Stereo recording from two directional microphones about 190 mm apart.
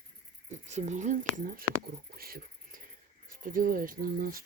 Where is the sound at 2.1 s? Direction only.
50° right (ahead or behind).